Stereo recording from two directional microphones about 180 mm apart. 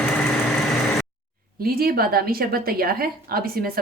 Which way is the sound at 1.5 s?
55° right (ahead or behind).